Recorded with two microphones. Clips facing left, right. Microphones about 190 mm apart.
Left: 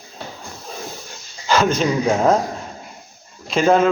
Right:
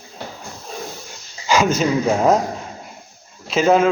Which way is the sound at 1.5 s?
10° right (ahead or behind).